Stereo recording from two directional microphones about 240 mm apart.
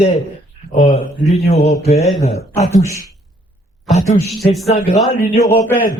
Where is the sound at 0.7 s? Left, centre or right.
Left.